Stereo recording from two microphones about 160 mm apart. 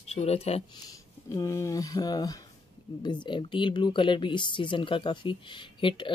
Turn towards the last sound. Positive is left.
turn(degrees=30)  # may be behind; listen again after turning